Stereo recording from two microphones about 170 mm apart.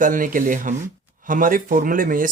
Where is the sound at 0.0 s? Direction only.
55° right (ahead or behind).